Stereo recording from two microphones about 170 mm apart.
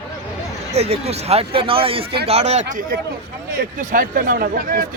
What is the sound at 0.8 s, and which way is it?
A man's voice, 40° right (ahead or behind).